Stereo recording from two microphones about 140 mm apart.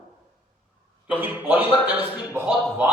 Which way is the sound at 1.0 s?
10° right (ahead or behind).